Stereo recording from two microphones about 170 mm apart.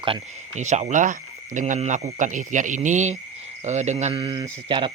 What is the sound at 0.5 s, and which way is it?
Speech, 45° right (ahead or behind).